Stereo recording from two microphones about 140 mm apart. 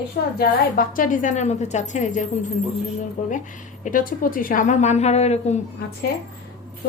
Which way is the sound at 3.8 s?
80° left.